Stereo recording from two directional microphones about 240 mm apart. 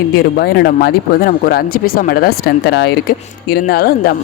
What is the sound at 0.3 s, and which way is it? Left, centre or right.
Speech, left.